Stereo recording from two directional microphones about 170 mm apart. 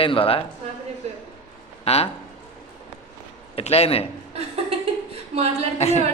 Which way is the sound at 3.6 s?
35° left (ahead or behind).